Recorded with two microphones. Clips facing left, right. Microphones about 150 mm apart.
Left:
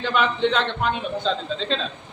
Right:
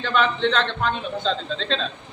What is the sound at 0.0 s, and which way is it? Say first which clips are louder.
Speech: even; 10° left (ahead or behind).